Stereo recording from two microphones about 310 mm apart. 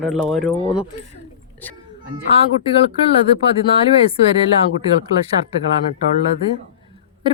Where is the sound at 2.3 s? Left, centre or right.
Centre.